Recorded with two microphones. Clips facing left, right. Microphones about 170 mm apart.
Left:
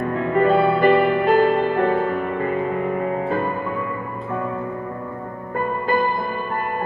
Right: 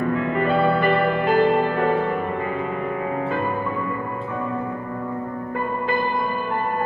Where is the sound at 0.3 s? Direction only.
40° left (ahead or behind).